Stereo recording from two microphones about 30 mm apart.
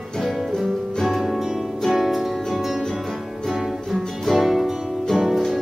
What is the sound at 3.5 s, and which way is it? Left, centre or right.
Music, centre.